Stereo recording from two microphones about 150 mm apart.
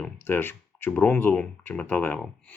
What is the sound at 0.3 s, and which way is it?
Speech, 15° left (ahead or behind).